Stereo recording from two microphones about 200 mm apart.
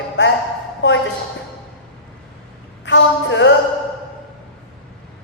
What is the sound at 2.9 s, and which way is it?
Speech, 65° left (ahead or behind).